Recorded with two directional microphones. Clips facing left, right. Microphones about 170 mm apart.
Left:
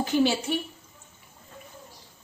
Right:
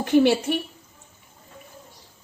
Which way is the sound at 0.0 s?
60° right (ahead or behind).